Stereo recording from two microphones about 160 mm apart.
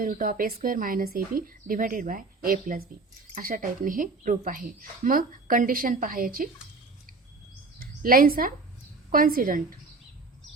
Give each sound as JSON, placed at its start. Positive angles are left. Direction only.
{"t": 0.0, "sound": "speech", "side_deg": -60}
{"t": 7.8, "sound": "speech", "side_deg": -65}